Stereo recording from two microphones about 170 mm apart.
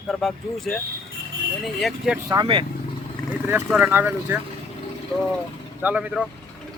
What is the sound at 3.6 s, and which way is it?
Speech, 5° right (ahead or behind).